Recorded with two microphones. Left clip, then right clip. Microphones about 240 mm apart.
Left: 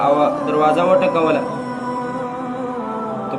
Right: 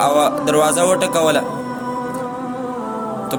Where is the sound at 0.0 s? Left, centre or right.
Right.